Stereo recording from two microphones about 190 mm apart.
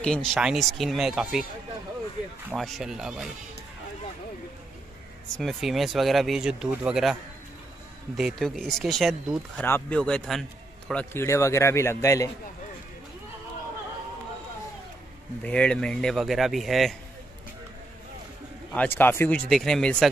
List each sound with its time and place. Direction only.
0.0 s speech: 5° left (ahead or behind)
2.5 s speech: centre (ahead or behind)
5.4 s speech: centre (ahead or behind)
8.2 s a man's voice: centre (ahead or behind)
15.4 s speech: 5° left (ahead or behind)
18.7 s a man's voice: 10° left (ahead or behind)